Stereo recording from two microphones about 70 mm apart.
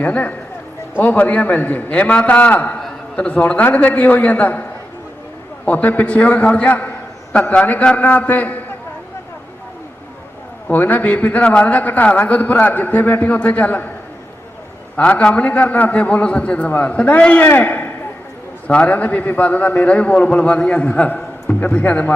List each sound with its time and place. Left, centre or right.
0.0 s a man's voice: left
10.7 s a man's voice: left
14.9 s a man's voice: centre